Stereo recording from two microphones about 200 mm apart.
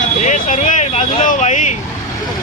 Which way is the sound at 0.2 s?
40° left (ahead or behind).